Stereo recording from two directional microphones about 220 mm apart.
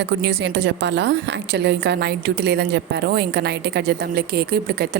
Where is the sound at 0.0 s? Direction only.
50° right (ahead or behind).